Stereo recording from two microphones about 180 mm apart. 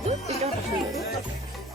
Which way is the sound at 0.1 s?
35° right (ahead or behind).